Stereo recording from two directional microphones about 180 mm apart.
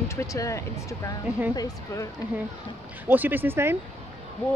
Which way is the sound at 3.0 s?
10° right (ahead or behind).